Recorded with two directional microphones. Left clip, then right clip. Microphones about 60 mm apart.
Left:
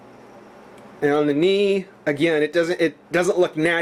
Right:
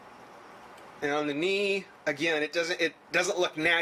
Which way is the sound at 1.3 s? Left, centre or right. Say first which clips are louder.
Left 10 dB; centre.